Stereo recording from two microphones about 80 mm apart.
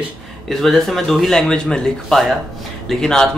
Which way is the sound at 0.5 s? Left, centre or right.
Centre.